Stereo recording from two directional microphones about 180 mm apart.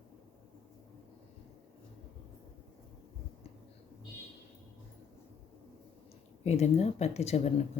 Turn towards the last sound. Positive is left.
turn(degrees=35)  # may be behind; listen again after turning